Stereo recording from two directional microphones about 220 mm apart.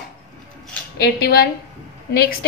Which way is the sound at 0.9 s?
45° left (ahead or behind).